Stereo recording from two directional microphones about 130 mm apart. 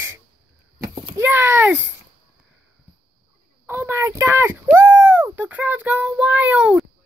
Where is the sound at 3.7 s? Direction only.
20° right (ahead or behind).